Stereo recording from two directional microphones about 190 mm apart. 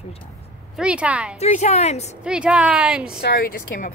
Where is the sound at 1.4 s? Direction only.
35° left (ahead or behind).